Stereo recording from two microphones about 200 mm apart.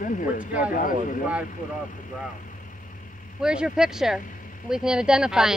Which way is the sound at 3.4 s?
5° right (ahead or behind).